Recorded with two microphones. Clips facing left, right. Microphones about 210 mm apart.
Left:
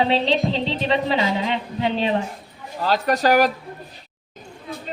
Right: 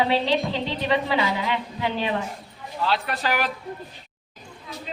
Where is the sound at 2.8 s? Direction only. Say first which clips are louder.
Left 6 dB; 40° left (ahead or behind).